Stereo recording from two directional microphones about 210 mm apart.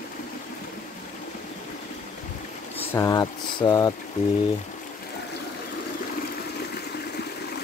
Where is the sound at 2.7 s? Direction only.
15° left (ahead or behind).